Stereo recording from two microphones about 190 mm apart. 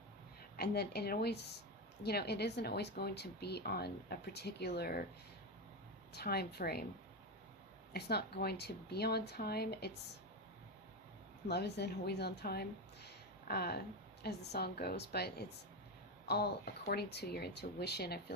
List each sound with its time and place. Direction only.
0.5 s speech: 55° left (ahead or behind)
6.1 s speech: 55° left (ahead or behind)
7.9 s speech: 60° left (ahead or behind)
11.4 s a woman's voice: 60° left (ahead or behind)